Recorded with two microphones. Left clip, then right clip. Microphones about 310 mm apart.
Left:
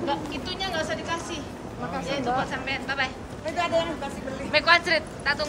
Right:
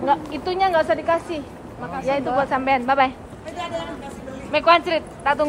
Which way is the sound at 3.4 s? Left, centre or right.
Centre.